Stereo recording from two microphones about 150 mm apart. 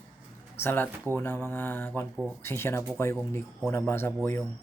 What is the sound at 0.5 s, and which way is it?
Speech, 15° left (ahead or behind).